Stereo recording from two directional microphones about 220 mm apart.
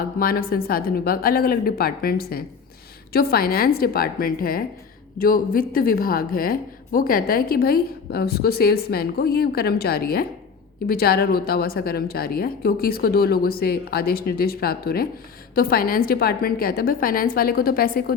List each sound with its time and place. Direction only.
0.2 s a woman's voice: 40° left (ahead or behind)